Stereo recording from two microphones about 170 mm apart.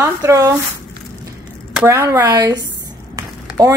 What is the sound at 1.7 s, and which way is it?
A woman's voice, 15° right (ahead or behind).